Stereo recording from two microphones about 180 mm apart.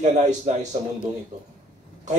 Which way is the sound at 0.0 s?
40° right (ahead or behind).